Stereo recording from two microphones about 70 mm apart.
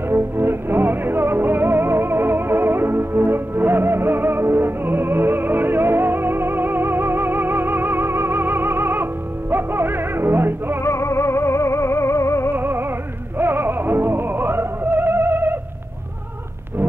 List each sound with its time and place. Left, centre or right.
0.1 s music: right
10.8 s music: left
12.5 s music: right